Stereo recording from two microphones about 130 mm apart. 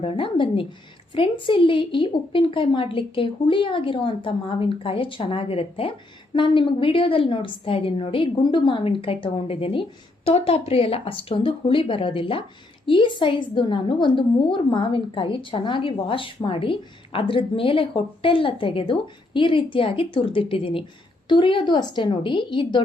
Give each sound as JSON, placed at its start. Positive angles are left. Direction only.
{"t": 0.0, "sound": "a woman's voice", "side_deg": 40}